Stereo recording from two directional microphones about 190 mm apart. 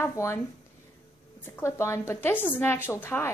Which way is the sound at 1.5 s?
15° left (ahead or behind).